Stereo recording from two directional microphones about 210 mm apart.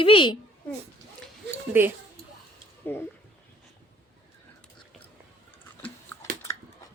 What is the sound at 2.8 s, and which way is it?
Speech, 10° left (ahead or behind).